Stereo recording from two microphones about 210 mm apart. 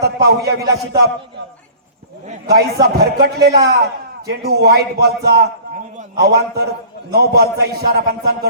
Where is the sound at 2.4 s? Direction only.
50° right (ahead or behind).